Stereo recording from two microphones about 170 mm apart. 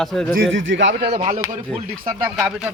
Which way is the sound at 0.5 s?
90° right.